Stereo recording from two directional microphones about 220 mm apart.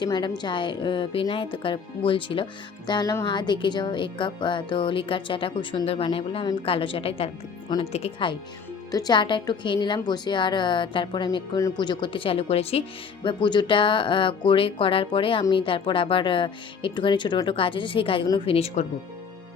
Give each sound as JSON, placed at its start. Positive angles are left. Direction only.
{"t": 0.0, "sound": "a woman's voice", "side_deg": 20}